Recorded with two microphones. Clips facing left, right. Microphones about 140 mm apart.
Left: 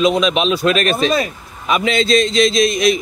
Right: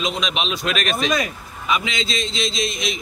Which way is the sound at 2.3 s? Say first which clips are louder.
Left 11 dB; 75° left (ahead or behind).